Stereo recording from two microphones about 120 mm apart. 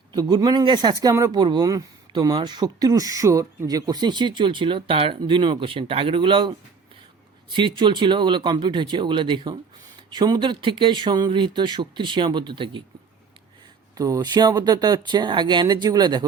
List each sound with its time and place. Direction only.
0.1 s speech: 35° right (ahead or behind)
13.9 s speech: 30° right (ahead or behind)